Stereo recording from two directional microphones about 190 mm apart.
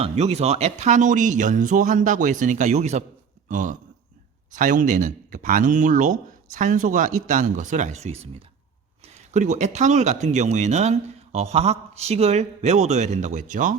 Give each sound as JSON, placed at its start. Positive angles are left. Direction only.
{"t": 0.0, "sound": "speech", "side_deg": -35}